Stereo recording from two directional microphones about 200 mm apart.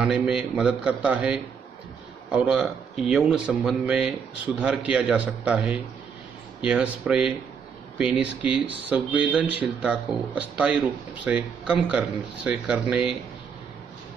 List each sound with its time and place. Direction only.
0.0 s speech: 5° right (ahead or behind)